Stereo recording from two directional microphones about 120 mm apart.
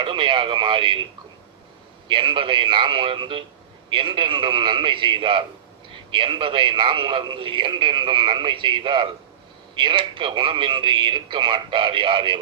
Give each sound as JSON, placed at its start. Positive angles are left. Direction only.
{"t": 0.0, "sound": "a man's voice", "side_deg": -45}
{"t": 2.0, "sound": "a man's voice", "side_deg": -45}